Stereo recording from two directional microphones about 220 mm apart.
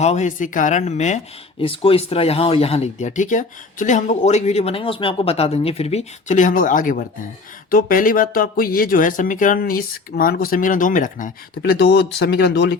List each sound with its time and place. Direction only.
0.0 s speech: 30° left (ahead or behind); by 12.7 s 50° left (ahead or behind)